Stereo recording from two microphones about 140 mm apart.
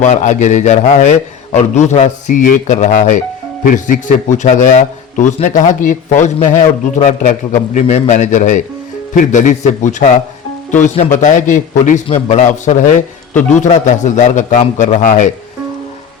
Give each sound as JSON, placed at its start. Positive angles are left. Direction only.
{"t": 0.0, "sound": "a man's voice", "side_deg": 60}
{"t": 3.6, "sound": "a man's voice", "side_deg": 70}
{"t": 11.2, "sound": "a man's voice", "side_deg": 65}
{"t": 12.0, "sound": "a man's voice", "side_deg": 50}